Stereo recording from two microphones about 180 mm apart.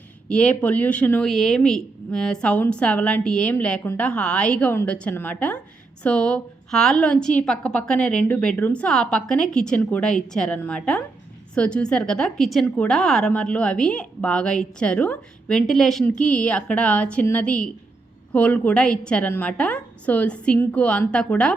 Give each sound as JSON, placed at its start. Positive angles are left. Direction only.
{"t": 0.3, "sound": "a woman's voice", "side_deg": 5}